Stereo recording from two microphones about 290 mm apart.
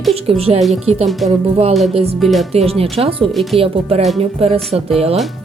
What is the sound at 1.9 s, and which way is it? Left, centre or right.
Speech, centre.